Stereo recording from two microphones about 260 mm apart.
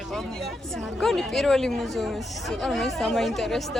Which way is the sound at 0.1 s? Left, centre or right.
Centre.